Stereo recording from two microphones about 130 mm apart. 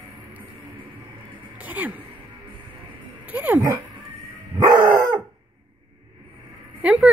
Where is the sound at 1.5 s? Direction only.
10° right (ahead or behind).